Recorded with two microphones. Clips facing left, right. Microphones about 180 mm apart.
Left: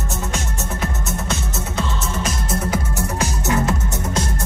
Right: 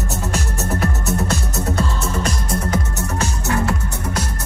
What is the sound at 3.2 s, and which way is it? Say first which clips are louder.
Music: even; 20° left (ahead or behind).